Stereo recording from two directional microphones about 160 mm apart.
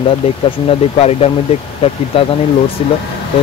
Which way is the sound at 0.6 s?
40° left (ahead or behind).